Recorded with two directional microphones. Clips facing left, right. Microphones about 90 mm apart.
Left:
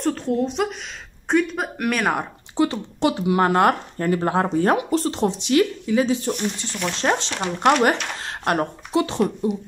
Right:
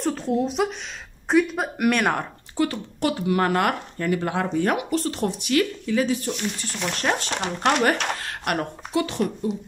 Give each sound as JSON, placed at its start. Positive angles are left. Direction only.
{"t": 0.0, "sound": "speech", "side_deg": 0}
{"t": 2.5, "sound": "speech", "side_deg": 25}